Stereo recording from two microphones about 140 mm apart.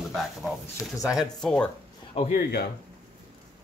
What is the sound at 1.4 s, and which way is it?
Speech, 5° left (ahead or behind).